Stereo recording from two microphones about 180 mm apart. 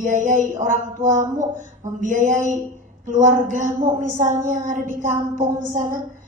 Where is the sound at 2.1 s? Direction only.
45° right (ahead or behind).